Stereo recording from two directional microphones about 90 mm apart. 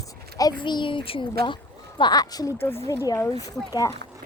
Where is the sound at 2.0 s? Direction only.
45° left (ahead or behind).